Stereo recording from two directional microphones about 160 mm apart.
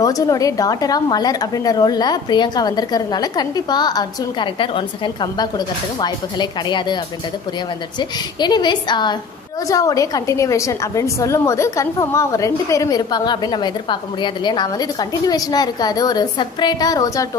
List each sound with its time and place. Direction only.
0.0 s a woman's voice: 20° left (ahead or behind)
8.0 s a woman's voice: 25° left (ahead or behind)